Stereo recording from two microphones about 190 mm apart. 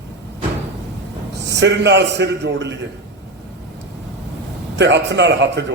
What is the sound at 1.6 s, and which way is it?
A man's voice, 65° right (ahead or behind).